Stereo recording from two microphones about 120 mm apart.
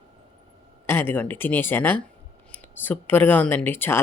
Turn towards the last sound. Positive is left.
turn(degrees=15)  # may be behind; listen again after turning